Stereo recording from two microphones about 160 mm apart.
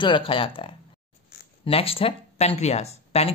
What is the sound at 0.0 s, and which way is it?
Speech, 30° left (ahead or behind).